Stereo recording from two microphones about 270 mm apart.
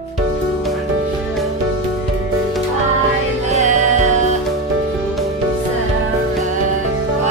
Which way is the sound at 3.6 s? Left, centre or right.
Right.